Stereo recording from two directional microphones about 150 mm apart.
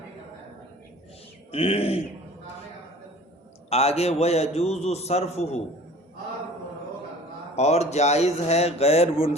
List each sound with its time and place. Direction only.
1.5 s speech: 40° left (ahead or behind)
3.7 s a man's voice: 45° left (ahead or behind)
7.5 s a man's voice: 45° left (ahead or behind)